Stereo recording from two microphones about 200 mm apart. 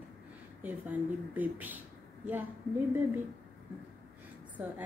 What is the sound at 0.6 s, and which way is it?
A woman's voice, 10° right (ahead or behind).